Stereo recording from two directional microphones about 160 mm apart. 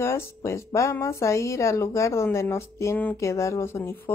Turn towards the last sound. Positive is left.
turn(degrees=15)  # may be behind; listen again after turning